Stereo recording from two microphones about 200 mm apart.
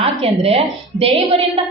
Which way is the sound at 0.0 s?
30° right (ahead or behind).